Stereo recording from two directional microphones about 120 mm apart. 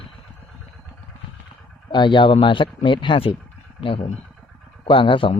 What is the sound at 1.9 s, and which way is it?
Speech, 40° left (ahead or behind).